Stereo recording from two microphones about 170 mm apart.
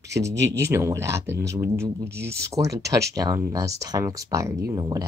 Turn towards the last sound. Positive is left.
turn(degrees=-20)  # may be behind; listen again after turning